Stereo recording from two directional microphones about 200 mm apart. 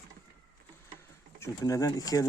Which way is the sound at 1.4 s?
15° left (ahead or behind).